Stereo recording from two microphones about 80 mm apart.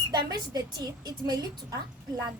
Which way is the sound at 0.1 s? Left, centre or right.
Right.